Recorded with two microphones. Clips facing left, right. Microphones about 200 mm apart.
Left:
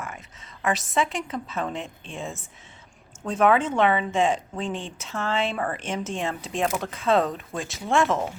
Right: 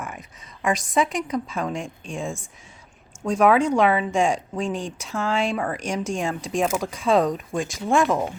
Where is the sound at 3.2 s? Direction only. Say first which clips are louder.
Right 3 dB; 10° right (ahead or behind).